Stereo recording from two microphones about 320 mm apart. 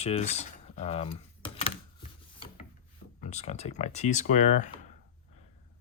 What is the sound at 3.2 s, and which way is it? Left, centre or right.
Speech, left.